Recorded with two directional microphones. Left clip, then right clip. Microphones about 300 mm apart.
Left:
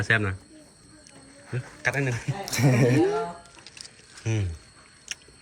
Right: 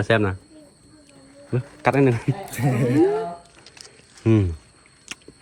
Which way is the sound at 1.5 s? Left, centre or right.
Centre.